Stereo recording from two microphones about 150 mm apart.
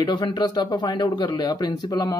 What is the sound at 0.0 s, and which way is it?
Speech, 30° left (ahead or behind).